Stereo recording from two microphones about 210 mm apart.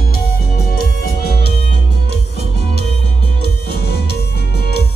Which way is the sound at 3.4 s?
50° left (ahead or behind).